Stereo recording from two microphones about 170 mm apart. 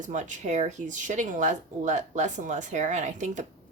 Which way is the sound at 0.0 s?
45° right (ahead or behind).